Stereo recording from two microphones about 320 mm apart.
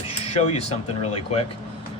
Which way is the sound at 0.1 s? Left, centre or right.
Centre.